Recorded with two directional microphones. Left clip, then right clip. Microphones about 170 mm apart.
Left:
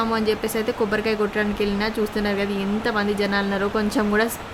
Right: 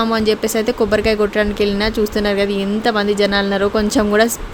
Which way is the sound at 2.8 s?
35° right (ahead or behind).